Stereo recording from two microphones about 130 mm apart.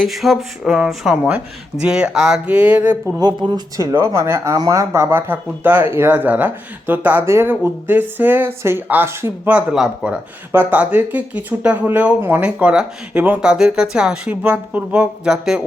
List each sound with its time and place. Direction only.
0.0 s speech: centre (ahead or behind)
3.2 s speech: 30° right (ahead or behind)
3.9 s speech: 20° right (ahead or behind); by 15.6 s 5° right (ahead or behind)